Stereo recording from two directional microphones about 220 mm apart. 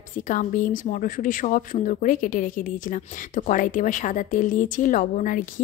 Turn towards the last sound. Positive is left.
turn(degrees=40)  # may be behind; listen again after turning